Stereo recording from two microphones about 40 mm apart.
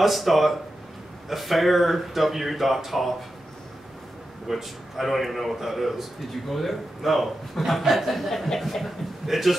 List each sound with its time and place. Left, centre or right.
0.0 s speech: centre
4.5 s speech: centre